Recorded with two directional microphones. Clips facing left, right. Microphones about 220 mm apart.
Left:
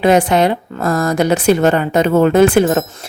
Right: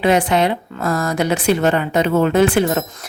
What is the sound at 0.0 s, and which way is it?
A woman's voice, 45° left (ahead or behind).